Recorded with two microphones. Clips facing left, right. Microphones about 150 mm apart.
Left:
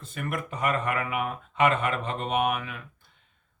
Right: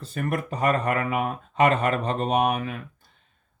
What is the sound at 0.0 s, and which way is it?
Speech, 40° right (ahead or behind).